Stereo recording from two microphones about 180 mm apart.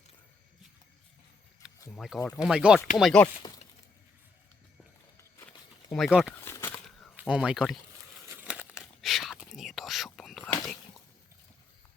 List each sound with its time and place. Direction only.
1.6 s a sound: 5° right (ahead or behind)
2.1 s speech: 15° left (ahead or behind)
2.4 s speech: 5° right (ahead or behind)
3.4 s a sound: 20° left (ahead or behind)
5.9 s speech: centre (ahead or behind)
6.3 s crumpling: 15° left (ahead or behind)
6.8 s a sound: centre (ahead or behind)
8.3 s crumpling: 10° right (ahead or behind)
9.6 s whispering: centre (ahead or behind)